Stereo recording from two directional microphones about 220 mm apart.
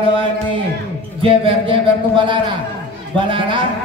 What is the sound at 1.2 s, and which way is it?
A man's voice, 25° right (ahead or behind).